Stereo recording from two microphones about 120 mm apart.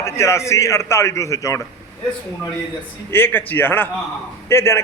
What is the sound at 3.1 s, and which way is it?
A man's voice, 20° left (ahead or behind).